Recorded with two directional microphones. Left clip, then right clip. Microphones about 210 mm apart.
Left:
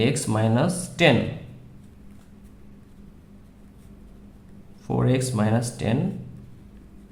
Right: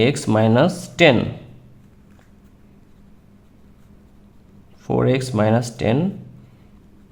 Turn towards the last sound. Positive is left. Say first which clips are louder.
# right 7 dB
turn(degrees=-30)  # may be behind; listen again after turning